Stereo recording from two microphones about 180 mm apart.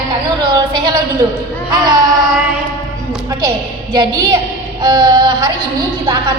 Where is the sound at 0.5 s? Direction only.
25° right (ahead or behind).